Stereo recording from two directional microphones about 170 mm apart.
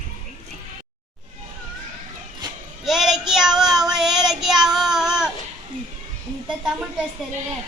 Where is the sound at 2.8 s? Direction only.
Centre (ahead or behind).